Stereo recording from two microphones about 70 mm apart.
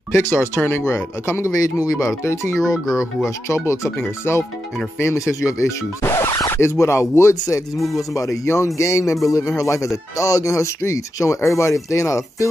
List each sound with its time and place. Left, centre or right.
0.1 s speech: left
0.8 s speech: left
1.6 s speech: left
4.9 s speech: left